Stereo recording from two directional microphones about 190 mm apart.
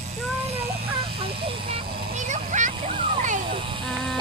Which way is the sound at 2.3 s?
40° right (ahead or behind).